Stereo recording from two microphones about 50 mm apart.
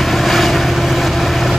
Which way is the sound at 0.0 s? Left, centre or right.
Centre.